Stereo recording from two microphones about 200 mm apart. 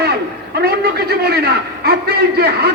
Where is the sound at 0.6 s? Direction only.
50° right (ahead or behind).